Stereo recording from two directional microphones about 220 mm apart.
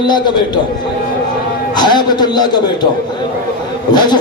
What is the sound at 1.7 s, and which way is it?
A man's voice, 20° left (ahead or behind).